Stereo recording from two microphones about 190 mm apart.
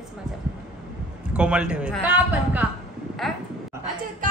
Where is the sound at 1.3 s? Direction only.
5° right (ahead or behind).